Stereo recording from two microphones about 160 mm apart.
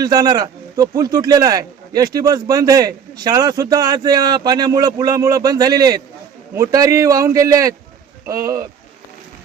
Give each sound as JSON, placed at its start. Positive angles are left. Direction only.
{"t": 0.0, "sound": "speech", "side_deg": -25}